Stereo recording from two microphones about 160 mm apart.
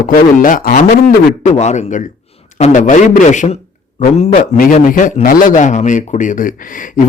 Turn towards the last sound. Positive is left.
turn(degrees=55)  # may be behind; listen again after turning